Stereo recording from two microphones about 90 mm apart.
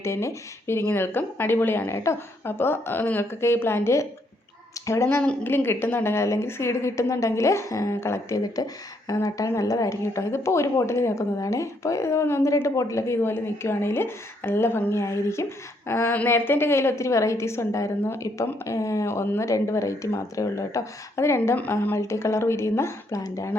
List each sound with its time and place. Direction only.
0.0 s speech: 30° left (ahead or behind)
5.4 s a woman's voice: 25° left (ahead or behind)
8.5 s a woman's voice: 45° left (ahead or behind); by 21.9 s 20° left (ahead or behind)
21.9 s a woman's voice: 30° left (ahead or behind)